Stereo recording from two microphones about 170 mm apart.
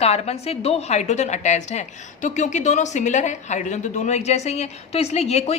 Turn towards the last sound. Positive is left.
turn(degrees=40)  # may be behind; listen again after turning